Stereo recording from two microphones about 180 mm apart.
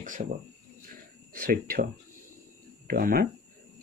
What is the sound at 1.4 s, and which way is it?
Speech, 50° right (ahead or behind).